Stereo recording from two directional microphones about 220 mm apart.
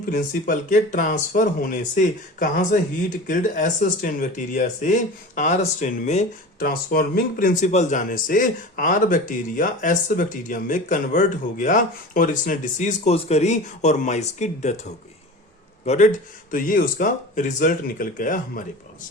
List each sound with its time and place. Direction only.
0.0 s speech: 40° left (ahead or behind)